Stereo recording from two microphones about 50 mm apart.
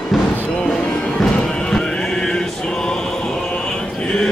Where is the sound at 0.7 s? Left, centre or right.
Centre.